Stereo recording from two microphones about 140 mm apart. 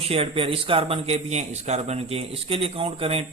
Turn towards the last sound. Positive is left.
turn(degrees=-45)  # may be behind; listen again after turning